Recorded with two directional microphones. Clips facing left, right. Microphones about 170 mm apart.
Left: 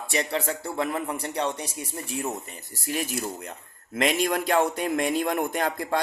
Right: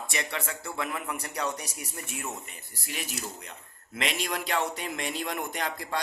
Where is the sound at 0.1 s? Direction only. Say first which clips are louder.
Left 9 dB; 35° left (ahead or behind).